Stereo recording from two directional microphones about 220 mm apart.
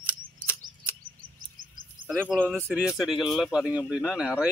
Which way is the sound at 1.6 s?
40° right (ahead or behind).